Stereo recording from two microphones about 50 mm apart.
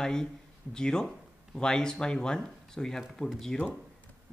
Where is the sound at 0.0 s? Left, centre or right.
Centre.